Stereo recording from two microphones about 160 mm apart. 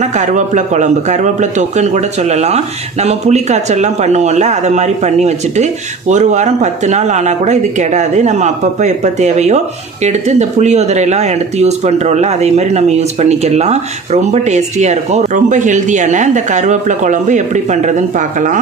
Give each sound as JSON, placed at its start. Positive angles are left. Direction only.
{"t": 0.2, "sound": "speech", "side_deg": -50}